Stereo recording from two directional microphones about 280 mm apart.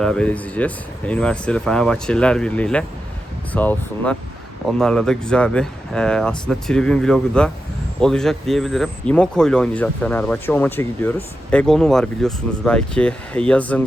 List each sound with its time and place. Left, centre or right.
0.0 s a man's voice: centre